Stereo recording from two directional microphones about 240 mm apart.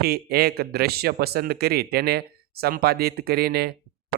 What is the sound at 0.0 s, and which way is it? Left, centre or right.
Speech, right.